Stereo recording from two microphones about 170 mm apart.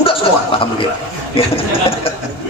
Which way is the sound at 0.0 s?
30° left (ahead or behind).